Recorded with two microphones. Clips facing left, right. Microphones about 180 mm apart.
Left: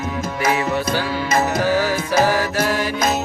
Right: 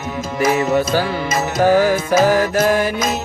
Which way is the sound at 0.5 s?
45° right (ahead or behind).